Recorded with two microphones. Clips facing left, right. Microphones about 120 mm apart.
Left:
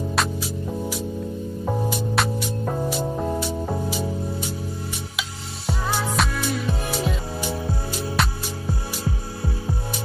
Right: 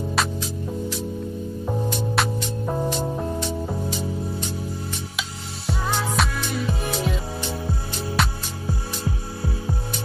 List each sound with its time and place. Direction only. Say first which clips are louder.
0.1 s music: even; 5° left (ahead or behind)
5.7 s music: even; centre (ahead or behind)